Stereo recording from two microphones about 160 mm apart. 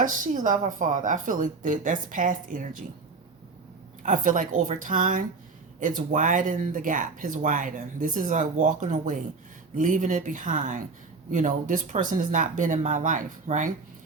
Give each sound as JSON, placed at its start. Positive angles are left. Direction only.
{"t": 0.0, "sound": "speech", "side_deg": -55}
{"t": 4.0, "sound": "speech", "side_deg": -55}